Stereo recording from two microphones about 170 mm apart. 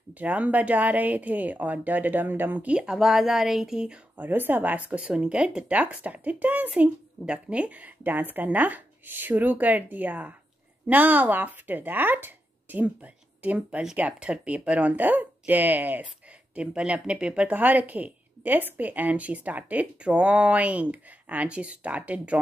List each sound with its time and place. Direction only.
0.1 s speech: 10° right (ahead or behind)